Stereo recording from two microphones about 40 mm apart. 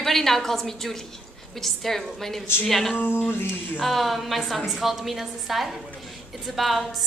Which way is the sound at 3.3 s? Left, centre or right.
Left.